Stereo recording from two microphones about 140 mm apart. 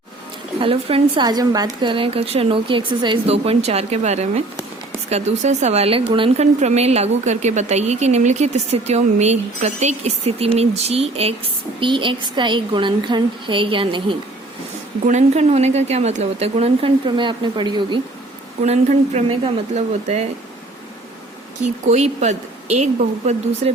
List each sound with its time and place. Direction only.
0.6 s a woman's voice: 40° right (ahead or behind)
3.3 s a woman's voice: 45° right (ahead or behind)
15.0 s speech: 55° right (ahead or behind); by 18.0 s 35° right (ahead or behind)
18.6 s speech: 55° right (ahead or behind)
21.6 s a woman's voice: 55° right (ahead or behind)